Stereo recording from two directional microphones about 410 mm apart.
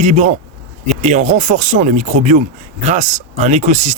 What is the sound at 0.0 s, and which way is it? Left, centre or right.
Speech, centre.